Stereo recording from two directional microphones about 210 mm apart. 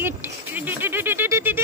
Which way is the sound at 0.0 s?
10° right (ahead or behind).